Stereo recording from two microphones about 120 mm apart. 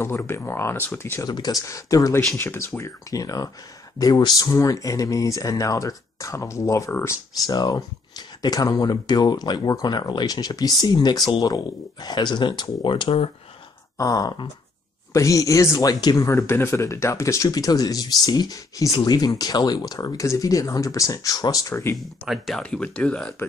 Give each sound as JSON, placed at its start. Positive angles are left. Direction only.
{"t": 0.0, "sound": "speech", "side_deg": 20}
{"t": 1.2, "sound": "speech", "side_deg": 35}
{"t": 13.9, "sound": "speech", "side_deg": 30}
{"t": 21.9, "sound": "speech", "side_deg": 0}